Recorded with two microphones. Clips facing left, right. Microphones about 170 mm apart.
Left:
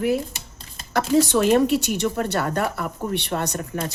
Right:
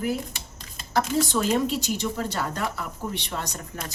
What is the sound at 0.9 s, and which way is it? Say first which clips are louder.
Speech: left 5 dB; 65° left (ahead or behind).